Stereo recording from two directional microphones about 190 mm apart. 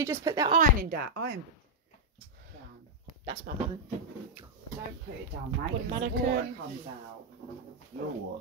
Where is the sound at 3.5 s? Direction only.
45° right (ahead or behind).